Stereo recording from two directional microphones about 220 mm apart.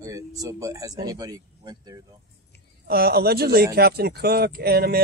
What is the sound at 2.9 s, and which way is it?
Speech, 45° right (ahead or behind).